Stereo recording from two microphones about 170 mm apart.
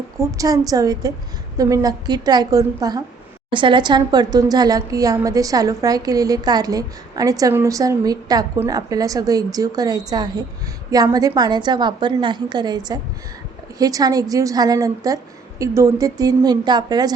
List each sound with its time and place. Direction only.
0.2 s a woman's voice: 20° right (ahead or behind)